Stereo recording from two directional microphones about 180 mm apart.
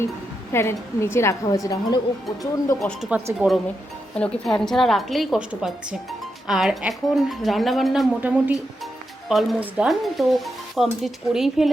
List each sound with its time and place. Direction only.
0.5 s a woman's voice: 15° left (ahead or behind)
2.7 s speech: centre (ahead or behind)